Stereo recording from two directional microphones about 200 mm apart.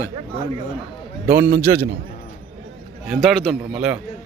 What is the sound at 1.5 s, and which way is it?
Speech, 45° right (ahead or behind).